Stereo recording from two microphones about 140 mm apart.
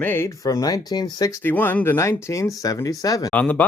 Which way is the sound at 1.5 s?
15° left (ahead or behind).